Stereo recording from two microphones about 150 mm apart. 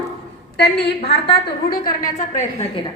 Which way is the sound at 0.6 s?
90° left.